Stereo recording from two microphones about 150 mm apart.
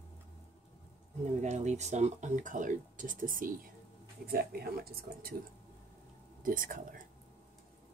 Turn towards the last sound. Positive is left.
turn(degrees=-65)  # may be behind; listen again after turning